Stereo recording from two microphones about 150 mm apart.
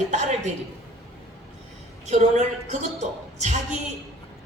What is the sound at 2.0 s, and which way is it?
A woman's voice, 50° right (ahead or behind).